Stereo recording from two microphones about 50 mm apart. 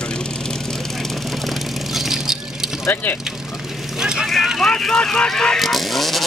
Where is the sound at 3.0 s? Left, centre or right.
Left.